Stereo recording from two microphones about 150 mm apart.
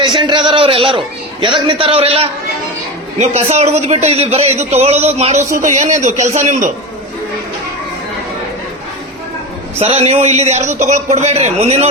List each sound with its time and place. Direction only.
0.0 s a man's voice: 30° right (ahead or behind); by 6.7 s 55° right (ahead or behind)
9.7 s a man's voice: 40° right (ahead or behind)